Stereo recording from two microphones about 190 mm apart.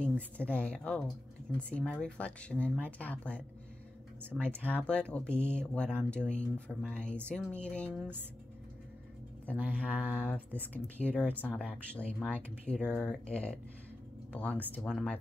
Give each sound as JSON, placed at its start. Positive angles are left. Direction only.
{"t": 0.4, "sound": "speech", "side_deg": 5}
{"t": 9.6, "sound": "speech", "side_deg": -5}
{"t": 10.1, "sound": "speech", "side_deg": 10}